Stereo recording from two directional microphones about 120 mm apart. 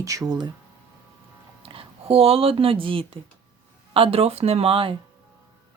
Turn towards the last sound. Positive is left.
turn(degrees=-50)  # may be behind; listen again after turning